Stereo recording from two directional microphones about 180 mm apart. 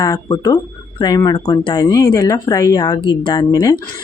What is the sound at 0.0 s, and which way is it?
Speech, 20° left (ahead or behind).